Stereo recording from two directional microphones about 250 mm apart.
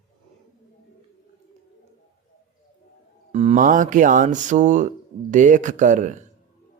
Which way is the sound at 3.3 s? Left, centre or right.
Right.